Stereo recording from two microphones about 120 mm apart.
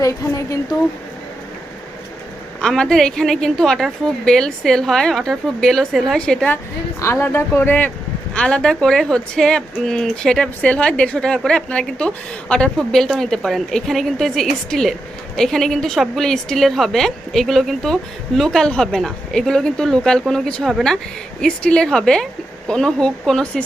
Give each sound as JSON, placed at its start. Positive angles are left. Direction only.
{"t": 0.0, "sound": "speech", "side_deg": 25}
{"t": 2.6, "sound": "a woman's voice", "side_deg": 5}
{"t": 7.0, "sound": "a woman's voice", "side_deg": 20}